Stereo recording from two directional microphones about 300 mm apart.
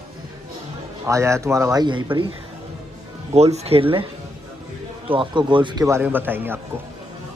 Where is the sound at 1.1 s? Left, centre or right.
Centre.